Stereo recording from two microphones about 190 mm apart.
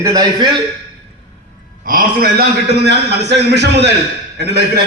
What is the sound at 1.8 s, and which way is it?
A man's voice, 50° right (ahead or behind).